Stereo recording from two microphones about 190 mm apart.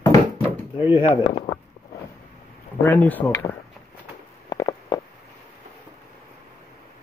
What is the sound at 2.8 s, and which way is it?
Speech, 10° left (ahead or behind).